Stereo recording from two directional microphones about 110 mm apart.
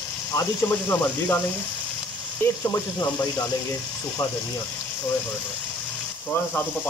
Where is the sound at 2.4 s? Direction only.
30° left (ahead or behind).